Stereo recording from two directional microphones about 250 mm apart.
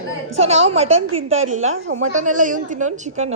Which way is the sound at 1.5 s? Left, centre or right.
Right.